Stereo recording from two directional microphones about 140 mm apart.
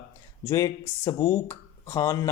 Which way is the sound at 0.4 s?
20° left (ahead or behind).